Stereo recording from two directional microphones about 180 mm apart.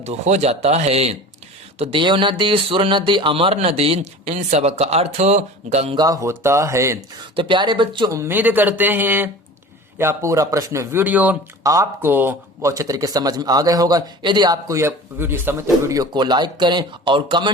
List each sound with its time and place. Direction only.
0.0 s speech: 40° right (ahead or behind)
6.0 s speech: 20° right (ahead or behind)
7.3 s speech: 25° right (ahead or behind)